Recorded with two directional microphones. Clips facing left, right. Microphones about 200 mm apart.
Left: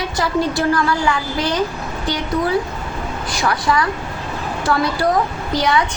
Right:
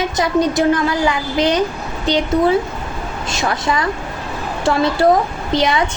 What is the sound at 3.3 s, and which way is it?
A woman's voice, 25° right (ahead or behind).